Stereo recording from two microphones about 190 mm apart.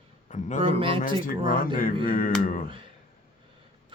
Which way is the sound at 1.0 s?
45° left (ahead or behind).